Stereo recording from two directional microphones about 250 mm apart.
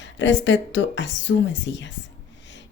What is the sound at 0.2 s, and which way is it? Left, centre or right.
Speech, left.